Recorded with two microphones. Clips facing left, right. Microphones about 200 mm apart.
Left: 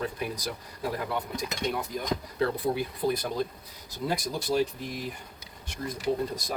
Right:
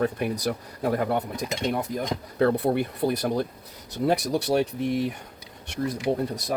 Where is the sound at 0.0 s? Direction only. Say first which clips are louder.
Right 7 dB; 60° right (ahead or behind).